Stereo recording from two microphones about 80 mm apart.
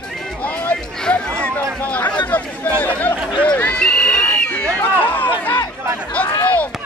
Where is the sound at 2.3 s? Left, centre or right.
Left.